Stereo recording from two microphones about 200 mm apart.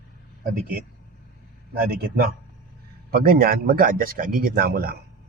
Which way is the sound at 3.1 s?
50° right (ahead or behind).